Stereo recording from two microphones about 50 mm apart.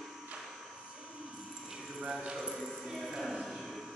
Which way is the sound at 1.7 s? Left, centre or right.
Right.